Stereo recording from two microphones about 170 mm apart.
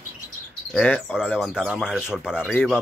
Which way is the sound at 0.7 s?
Centre (ahead or behind).